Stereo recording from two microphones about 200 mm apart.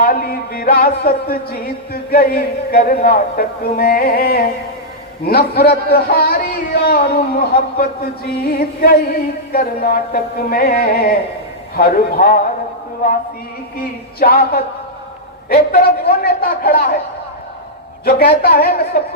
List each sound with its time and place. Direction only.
0.0 s a man's voice: 45° left (ahead or behind)
14.2 s a man's voice: 50° left (ahead or behind)
18.0 s a man's voice: 50° left (ahead or behind)